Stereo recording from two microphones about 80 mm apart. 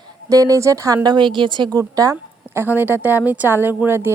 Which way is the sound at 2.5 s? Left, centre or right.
Right.